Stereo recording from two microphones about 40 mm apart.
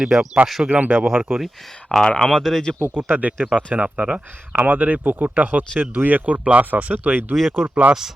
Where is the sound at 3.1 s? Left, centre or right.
Right.